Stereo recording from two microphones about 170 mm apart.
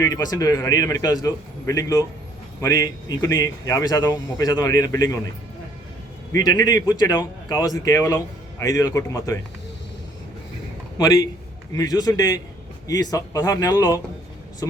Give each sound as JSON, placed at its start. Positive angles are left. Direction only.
{"t": 0.0, "sound": "speech", "side_deg": 20}
{"t": 6.3, "sound": "speech", "side_deg": 20}
{"t": 10.9, "sound": "speech", "side_deg": 20}